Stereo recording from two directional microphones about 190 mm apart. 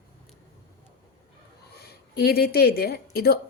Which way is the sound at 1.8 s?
55° left (ahead or behind).